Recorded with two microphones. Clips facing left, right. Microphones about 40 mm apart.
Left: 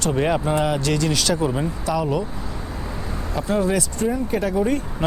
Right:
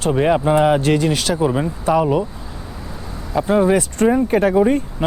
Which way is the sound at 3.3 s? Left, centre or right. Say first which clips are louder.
Right 6 dB; right.